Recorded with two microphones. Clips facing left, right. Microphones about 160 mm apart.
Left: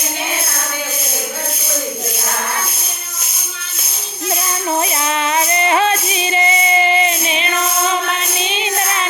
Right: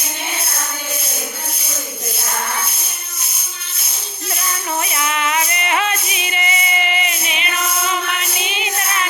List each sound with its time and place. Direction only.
4.8 s music: 30° left (ahead or behind)